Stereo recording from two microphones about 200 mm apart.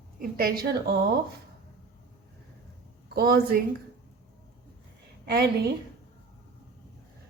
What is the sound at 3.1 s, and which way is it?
Speech, 50° right (ahead or behind).